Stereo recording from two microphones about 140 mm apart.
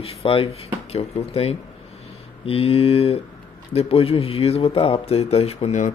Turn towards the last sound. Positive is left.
turn(degrees=50)  # may be behind; listen again after turning